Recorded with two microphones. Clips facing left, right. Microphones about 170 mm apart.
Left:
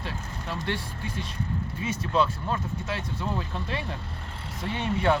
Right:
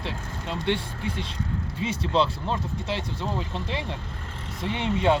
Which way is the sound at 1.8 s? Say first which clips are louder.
Right 2 dB; 25° right (ahead or behind).